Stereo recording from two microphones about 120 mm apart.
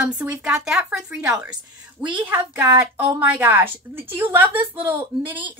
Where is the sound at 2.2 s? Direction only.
20° right (ahead or behind).